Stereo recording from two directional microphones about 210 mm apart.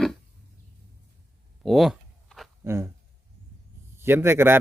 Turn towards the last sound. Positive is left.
turn(degrees=-10)  # may be behind; listen again after turning